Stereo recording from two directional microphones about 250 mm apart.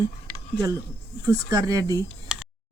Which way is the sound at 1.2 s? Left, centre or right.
Centre.